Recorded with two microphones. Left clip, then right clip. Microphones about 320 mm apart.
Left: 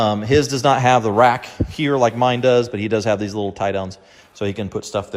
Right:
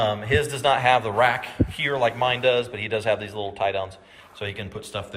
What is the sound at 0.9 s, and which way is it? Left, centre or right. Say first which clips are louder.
Speech: left 6 dB; left.